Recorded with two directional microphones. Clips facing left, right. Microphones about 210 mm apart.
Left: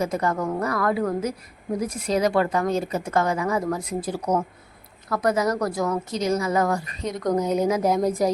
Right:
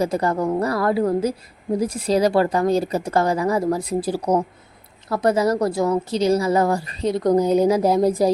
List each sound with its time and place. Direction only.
0.0 s a woman's voice: 35° right (ahead or behind)